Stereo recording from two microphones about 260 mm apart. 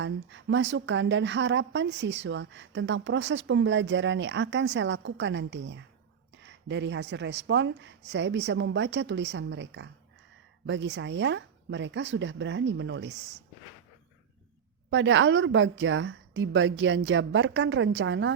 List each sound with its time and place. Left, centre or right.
0.0 s speech: right
14.8 s speech: right